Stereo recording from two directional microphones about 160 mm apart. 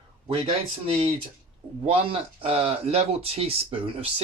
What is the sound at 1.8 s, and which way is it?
Speech, 35° right (ahead or behind).